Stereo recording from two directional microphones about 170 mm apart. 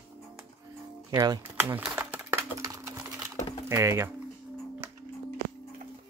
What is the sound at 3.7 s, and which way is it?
Speech, 20° right (ahead or behind).